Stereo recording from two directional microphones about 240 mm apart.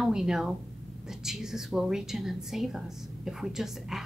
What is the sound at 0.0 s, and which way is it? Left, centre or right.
A woman's voice, centre.